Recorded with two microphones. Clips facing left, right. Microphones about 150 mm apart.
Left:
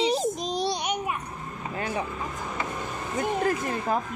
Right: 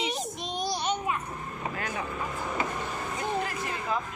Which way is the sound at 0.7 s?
15° left (ahead or behind).